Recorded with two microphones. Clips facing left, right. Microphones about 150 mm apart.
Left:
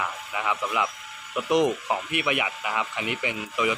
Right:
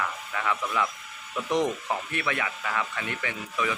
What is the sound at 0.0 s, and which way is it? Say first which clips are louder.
Speech: left 1 dB; 15° left (ahead or behind).